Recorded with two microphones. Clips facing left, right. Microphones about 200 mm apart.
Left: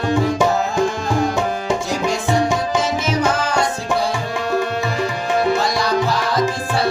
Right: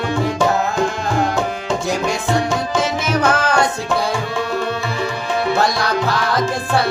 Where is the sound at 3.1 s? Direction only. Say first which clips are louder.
Right 3 dB; 55° right (ahead or behind).